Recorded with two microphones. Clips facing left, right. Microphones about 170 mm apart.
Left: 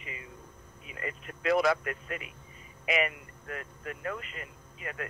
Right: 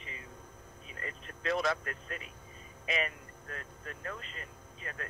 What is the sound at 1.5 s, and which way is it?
Speech, 85° left.